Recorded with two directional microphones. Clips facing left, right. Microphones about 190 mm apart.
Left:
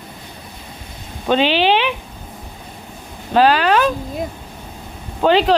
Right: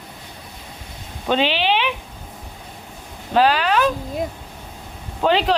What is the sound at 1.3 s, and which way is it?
Speech, 35° left (ahead or behind).